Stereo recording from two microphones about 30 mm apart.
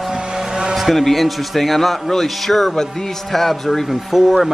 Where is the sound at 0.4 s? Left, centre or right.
Right.